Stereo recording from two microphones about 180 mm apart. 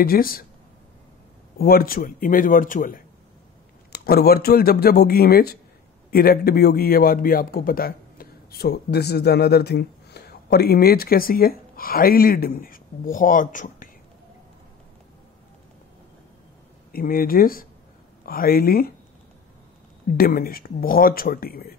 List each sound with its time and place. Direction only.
0.0 s speech: 55° left (ahead or behind)
1.6 s speech: 55° left (ahead or behind)
3.9 s a man's voice: 60° left (ahead or behind)
16.9 s speech: 55° left (ahead or behind)
20.2 s speech: 55° left (ahead or behind)